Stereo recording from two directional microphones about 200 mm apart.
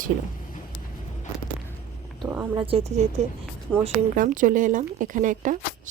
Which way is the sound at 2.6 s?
30° right (ahead or behind).